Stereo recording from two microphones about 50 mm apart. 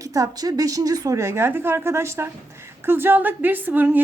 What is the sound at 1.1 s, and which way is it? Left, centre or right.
A woman's voice, right.